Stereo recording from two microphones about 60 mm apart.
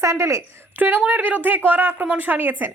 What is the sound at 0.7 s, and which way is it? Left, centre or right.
A woman's voice, right.